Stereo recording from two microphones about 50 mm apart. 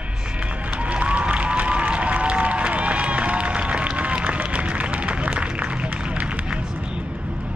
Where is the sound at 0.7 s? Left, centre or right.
Right.